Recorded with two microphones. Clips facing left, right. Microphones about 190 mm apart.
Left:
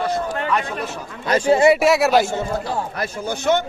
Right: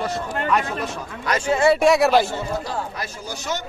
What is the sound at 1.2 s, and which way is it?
Speech, 30° left (ahead or behind).